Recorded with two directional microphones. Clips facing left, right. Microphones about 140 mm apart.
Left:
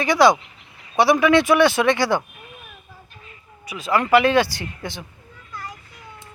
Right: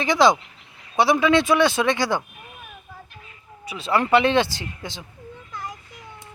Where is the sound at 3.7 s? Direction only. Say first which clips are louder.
Left 2 dB; 30° right (ahead or behind).